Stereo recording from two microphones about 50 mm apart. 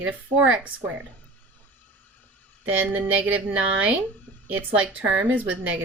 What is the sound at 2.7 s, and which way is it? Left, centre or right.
A woman's voice, right.